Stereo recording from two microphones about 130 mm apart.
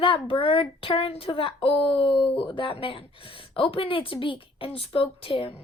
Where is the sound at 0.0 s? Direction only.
40° left (ahead or behind).